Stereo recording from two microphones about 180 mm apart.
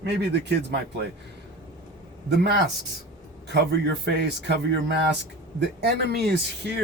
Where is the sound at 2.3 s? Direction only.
65° right (ahead or behind).